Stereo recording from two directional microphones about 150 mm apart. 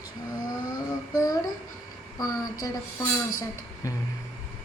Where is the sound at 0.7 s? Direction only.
25° left (ahead or behind).